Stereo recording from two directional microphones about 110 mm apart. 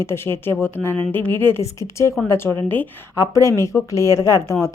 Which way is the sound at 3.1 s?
25° left (ahead or behind).